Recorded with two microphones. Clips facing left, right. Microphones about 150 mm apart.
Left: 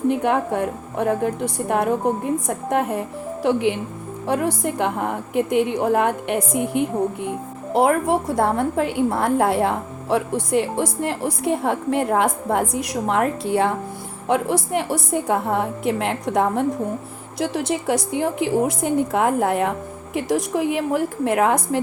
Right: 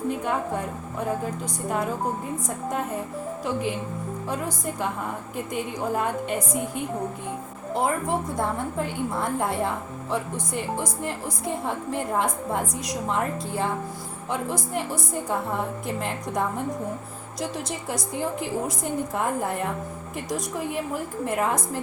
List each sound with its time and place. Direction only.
0.1 s a woman's voice: 65° left (ahead or behind)